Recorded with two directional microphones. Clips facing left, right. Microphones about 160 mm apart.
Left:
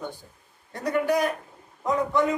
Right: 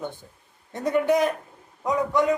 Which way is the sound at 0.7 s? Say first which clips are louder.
Right 3 dB; 20° right (ahead or behind).